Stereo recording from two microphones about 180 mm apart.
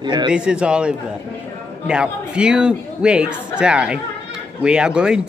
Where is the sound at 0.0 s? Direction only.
25° right (ahead or behind).